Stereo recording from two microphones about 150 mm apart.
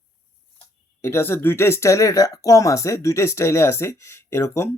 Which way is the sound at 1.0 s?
15° left (ahead or behind).